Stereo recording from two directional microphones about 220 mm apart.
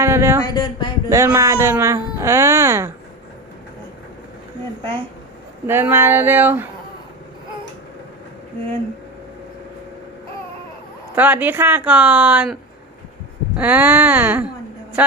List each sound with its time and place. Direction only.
0.0 s a sound: 10° right (ahead or behind)
0.4 s speech: 20° left (ahead or behind)
1.1 s speech: 15° right (ahead or behind)
5.6 s speech: 10° right (ahead or behind)
11.1 s speech: 10° right (ahead or behind)
13.6 s speech: 10° right (ahead or behind)